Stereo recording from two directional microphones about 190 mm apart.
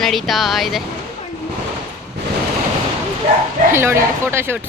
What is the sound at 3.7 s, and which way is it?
Speech, 15° right (ahead or behind).